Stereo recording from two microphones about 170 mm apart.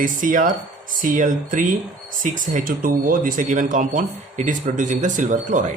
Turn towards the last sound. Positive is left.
turn(degrees=-50)  # may be behind; listen again after turning